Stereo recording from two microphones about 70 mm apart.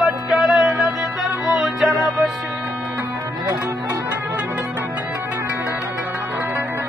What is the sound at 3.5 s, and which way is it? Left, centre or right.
Music, right.